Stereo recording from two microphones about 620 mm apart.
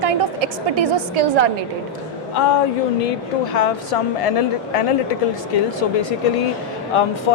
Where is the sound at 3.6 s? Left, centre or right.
Left.